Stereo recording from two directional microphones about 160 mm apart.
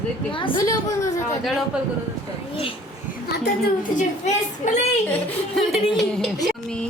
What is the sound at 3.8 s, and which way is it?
Speech, 50° left (ahead or behind).